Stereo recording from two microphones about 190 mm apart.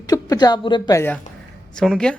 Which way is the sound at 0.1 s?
20° left (ahead or behind).